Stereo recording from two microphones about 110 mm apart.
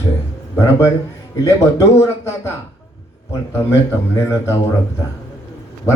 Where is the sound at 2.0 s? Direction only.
25° left (ahead or behind).